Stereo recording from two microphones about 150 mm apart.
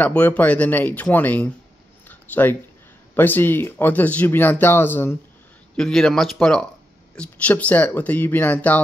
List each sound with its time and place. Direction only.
0.0 s speech: 10° left (ahead or behind)
2.0 s a sound: 10° left (ahead or behind)
3.2 s speech: 15° left (ahead or behind)